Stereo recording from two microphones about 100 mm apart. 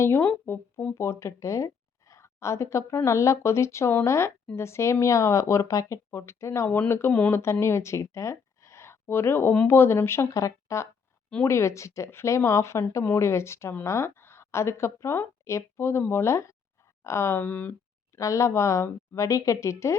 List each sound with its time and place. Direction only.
0.0 s a woman's voice: 20° left (ahead or behind)
18.2 s a woman's voice: 30° left (ahead or behind)